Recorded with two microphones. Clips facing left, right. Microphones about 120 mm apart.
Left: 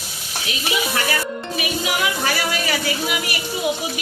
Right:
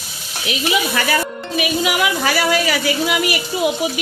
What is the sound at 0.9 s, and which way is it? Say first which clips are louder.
Speech: right 3 dB; 90° right.